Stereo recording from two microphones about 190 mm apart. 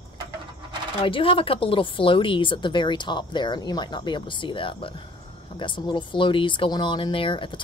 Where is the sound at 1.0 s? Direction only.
30° left (ahead or behind).